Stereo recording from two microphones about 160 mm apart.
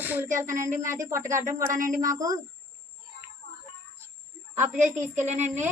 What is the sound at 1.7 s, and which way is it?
Speech, 55° right (ahead or behind).